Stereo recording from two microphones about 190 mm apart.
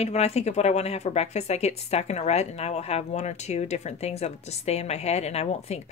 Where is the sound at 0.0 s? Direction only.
35° left (ahead or behind).